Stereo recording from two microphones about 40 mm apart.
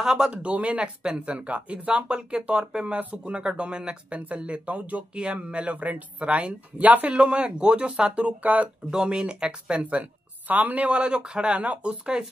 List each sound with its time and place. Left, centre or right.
0.0 s speech: centre
0.3 s speech: right
5.1 s speech: right
7.1 s speech: right
8.9 s speech: right
10.5 s speech: right